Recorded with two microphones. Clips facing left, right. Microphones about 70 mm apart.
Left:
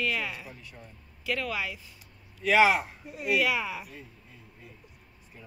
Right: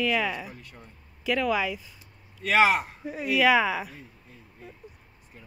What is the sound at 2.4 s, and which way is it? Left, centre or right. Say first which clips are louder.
Speech: even; right.